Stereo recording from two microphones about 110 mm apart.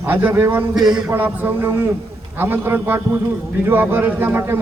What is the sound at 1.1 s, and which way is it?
A man's voice, 20° right (ahead or behind).